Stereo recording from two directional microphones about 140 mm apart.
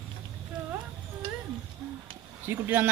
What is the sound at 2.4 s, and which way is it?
Speech, 15° right (ahead or behind).